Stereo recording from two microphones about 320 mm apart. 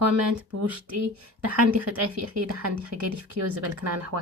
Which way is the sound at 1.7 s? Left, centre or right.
Right.